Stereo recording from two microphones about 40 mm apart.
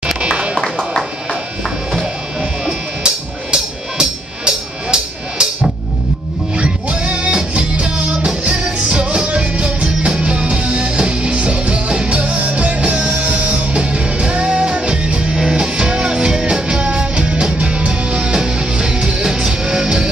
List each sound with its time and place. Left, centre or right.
0.2 s music: right
2.6 s music: right
6.5 s music: right